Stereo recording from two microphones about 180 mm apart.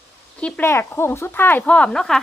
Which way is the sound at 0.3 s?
5° left (ahead or behind).